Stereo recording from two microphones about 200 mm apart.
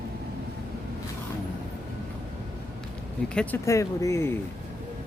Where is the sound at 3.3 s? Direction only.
5° left (ahead or behind).